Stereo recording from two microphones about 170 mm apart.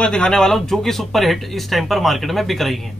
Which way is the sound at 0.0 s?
5° left (ahead or behind).